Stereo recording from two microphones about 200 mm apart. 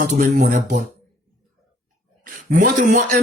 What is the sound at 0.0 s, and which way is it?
Speech, 40° right (ahead or behind).